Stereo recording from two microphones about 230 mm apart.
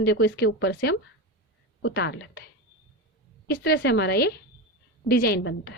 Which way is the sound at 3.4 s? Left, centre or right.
Left.